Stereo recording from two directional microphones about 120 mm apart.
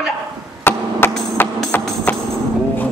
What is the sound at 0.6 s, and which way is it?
Chop, 20° left (ahead or behind).